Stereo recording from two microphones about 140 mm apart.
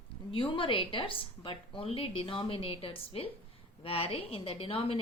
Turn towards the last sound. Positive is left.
turn(degrees=40)  # may be behind; listen again after turning